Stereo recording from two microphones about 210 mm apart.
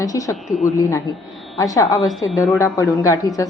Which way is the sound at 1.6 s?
15° left (ahead or behind).